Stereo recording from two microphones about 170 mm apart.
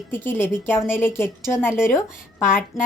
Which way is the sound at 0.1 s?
15° left (ahead or behind).